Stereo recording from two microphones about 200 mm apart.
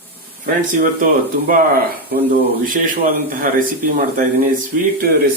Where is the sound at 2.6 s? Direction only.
40° right (ahead or behind).